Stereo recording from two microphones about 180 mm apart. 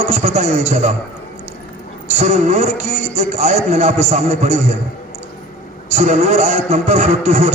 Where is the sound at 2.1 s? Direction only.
40° right (ahead or behind).